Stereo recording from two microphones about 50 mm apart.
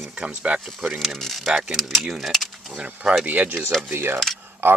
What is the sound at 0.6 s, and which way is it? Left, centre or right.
Speech, centre.